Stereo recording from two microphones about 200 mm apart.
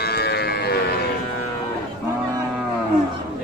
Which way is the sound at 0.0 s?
50° left (ahead or behind).